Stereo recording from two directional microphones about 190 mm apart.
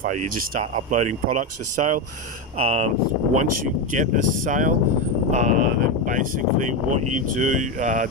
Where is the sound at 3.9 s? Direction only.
45° right (ahead or behind).